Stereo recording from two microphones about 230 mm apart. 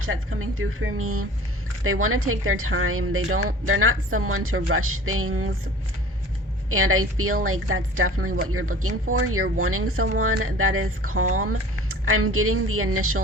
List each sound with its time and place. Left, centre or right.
0.0 s speech: right
6.7 s speech: right